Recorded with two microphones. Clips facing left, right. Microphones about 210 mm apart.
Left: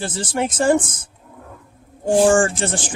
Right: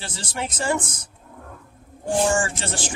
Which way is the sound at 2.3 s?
50° left (ahead or behind).